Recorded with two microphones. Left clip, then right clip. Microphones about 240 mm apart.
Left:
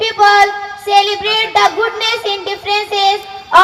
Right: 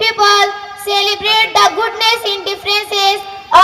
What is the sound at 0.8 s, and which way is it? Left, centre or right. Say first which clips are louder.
Child singing: left 2 dB; right.